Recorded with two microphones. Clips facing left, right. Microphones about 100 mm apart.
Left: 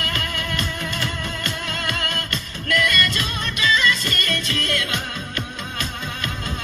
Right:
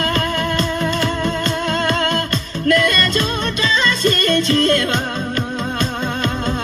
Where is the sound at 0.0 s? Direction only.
40° right (ahead or behind).